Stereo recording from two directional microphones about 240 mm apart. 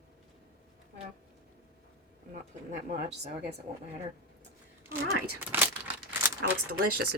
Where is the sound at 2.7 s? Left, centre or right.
Right.